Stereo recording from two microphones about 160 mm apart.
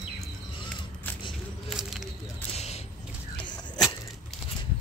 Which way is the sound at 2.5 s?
40° left (ahead or behind).